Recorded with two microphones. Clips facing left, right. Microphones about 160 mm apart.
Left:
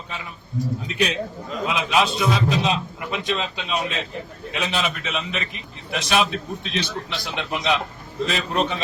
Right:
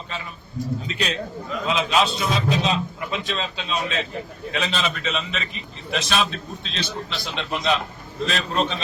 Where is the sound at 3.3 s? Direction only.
15° left (ahead or behind).